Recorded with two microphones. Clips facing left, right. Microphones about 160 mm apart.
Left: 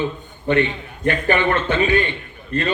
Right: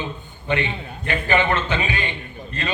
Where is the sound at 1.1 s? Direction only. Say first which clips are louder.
Left 3 dB; 50° left (ahead or behind).